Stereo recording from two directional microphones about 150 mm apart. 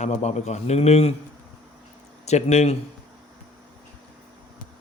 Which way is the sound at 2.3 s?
50° left (ahead or behind).